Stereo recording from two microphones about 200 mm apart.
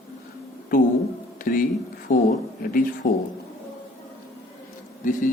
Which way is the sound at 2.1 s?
40° left (ahead or behind).